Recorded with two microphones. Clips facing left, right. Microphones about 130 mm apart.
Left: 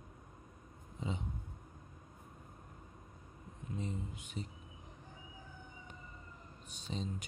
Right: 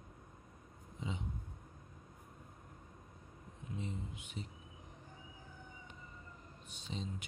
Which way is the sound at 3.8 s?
40° left (ahead or behind).